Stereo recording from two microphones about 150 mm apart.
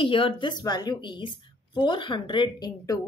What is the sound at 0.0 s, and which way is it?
A woman's voice, 35° left (ahead or behind).